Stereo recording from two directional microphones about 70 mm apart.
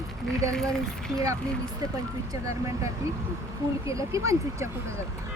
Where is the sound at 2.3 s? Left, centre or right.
Right.